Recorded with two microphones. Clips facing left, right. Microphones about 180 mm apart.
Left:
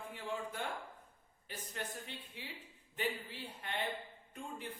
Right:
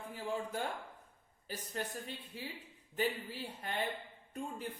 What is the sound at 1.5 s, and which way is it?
Speech, 40° right (ahead or behind).